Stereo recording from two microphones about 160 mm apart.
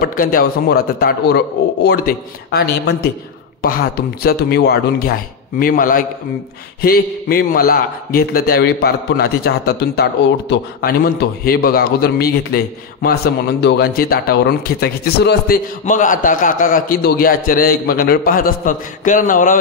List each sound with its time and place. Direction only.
0.0 s a man's voice: 60° left (ahead or behind); by 3.1 s 80° left
3.6 s a man's voice: 70° left (ahead or behind)
6.8 s a man's voice: 70° left (ahead or behind)
13.0 s a man's voice: 85° left
15.8 s a man's voice: 55° left (ahead or behind)